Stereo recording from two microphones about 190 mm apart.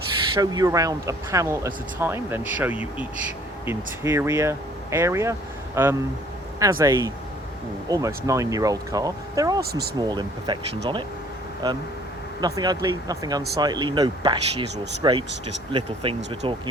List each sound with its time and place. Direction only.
0.3 s speech: 20° right (ahead or behind)
9.6 s speech: 55° right (ahead or behind)
10.0 s speech: 20° right (ahead or behind)
11.6 s speech: 20° right (ahead or behind)